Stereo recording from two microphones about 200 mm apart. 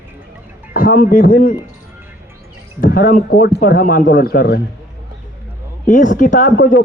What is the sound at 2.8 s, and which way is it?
A man's voice, 45° left (ahead or behind).